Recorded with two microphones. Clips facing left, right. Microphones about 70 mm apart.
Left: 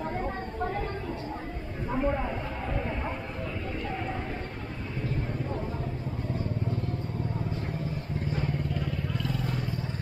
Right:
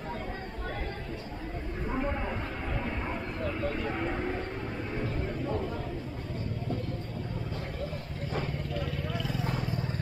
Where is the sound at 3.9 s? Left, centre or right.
Right.